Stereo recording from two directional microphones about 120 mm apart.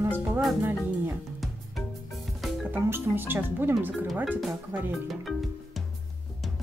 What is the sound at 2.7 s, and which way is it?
Speech, 20° right (ahead or behind).